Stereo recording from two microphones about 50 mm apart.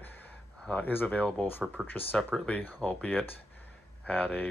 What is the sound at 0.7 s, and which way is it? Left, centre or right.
Speech, left.